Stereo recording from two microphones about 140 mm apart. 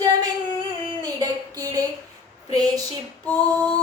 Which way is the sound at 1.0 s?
25° right (ahead or behind).